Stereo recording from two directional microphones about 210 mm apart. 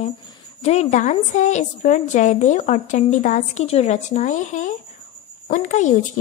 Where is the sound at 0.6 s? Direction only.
30° left (ahead or behind).